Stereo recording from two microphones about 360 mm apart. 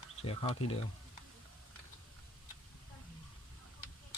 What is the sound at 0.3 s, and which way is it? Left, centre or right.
Speech, centre.